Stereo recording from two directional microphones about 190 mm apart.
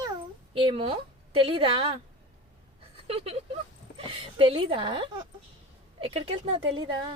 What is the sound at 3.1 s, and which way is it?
Speech, 30° right (ahead or behind).